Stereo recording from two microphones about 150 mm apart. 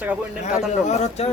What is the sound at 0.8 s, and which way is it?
Speech, 50° left (ahead or behind).